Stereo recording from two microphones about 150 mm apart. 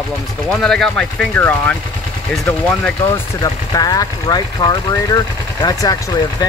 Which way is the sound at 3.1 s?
25° left (ahead or behind).